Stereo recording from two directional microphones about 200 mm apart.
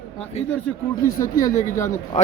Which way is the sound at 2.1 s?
35° left (ahead or behind).